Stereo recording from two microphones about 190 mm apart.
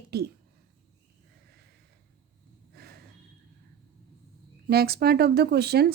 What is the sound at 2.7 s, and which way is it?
Snort, 55° right (ahead or behind).